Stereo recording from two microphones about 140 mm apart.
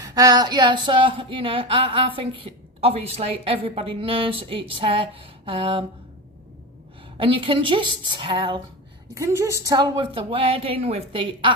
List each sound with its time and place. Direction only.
0.0 s a woman's voice: 25° right (ahead or behind)
7.2 s a woman's voice: 40° right (ahead or behind)
9.1 s a woman's voice: 20° right (ahead or behind); by 11.5 s 35° right (ahead or behind)